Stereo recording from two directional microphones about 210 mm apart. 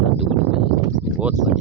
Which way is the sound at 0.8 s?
15° right (ahead or behind).